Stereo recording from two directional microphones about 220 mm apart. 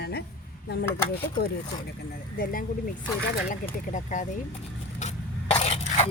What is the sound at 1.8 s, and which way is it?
Speech, 40° left (ahead or behind).